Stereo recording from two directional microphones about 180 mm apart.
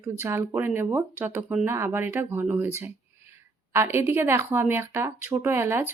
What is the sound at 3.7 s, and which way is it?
Speech, 15° right (ahead or behind).